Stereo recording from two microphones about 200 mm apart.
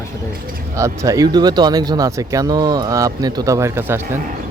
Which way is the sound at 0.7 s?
15° right (ahead or behind).